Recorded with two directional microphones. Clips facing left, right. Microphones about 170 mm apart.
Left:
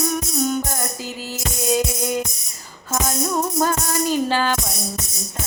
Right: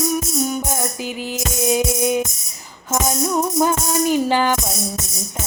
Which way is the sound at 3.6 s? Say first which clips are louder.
Right 3 dB; 15° right (ahead or behind).